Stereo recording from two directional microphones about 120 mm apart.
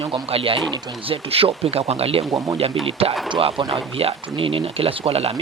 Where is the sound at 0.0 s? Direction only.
55° right (ahead or behind).